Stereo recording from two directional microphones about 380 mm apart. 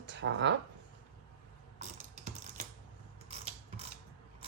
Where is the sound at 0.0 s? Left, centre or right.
Right.